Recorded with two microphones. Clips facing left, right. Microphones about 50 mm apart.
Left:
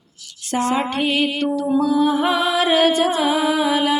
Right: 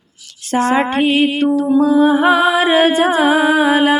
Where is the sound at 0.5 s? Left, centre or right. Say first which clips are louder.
Right 6 dB; right.